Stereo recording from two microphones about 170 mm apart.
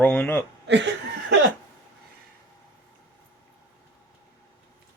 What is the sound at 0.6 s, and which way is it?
Chuckle, 90° right.